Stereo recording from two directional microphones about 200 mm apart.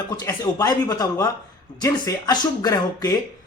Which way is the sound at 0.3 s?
20° left (ahead or behind).